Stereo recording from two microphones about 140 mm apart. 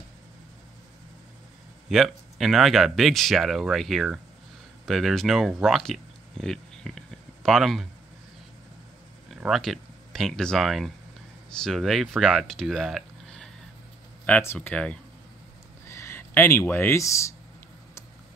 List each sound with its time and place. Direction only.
1.9 s speech: centre (ahead or behind)
5.6 s a sound: 5° left (ahead or behind)
9.3 s speech: centre (ahead or behind)
14.2 s speech: 15° left (ahead or behind)